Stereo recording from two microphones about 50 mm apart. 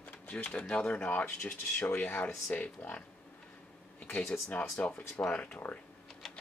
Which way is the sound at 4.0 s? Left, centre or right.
Left.